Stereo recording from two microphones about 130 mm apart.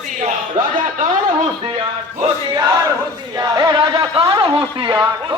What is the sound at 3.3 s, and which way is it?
Speech, 30° right (ahead or behind).